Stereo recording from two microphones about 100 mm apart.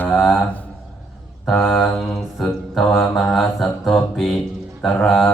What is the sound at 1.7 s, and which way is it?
Mantra, 5° left (ahead or behind).